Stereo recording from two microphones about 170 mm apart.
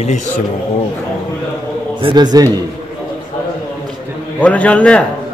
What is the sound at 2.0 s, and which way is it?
Speech, 30° right (ahead or behind).